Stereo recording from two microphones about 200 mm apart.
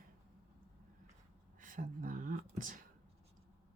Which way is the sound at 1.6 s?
40° right (ahead or behind).